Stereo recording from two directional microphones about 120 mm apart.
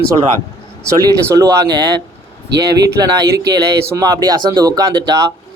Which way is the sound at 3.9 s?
30° right (ahead or behind).